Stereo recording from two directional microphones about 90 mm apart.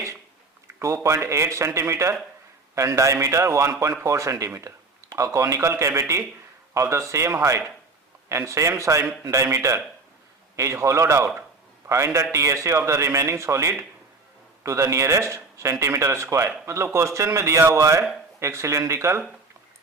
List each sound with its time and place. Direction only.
0.7 s speech: 30° right (ahead or behind)